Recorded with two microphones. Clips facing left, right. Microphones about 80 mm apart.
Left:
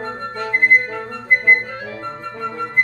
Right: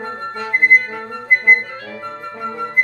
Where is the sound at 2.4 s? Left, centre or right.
Centre.